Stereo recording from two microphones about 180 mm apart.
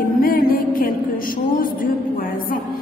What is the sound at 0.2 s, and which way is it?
Music, 55° left (ahead or behind).